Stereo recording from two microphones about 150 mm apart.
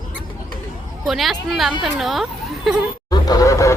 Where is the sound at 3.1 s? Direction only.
25° left (ahead or behind).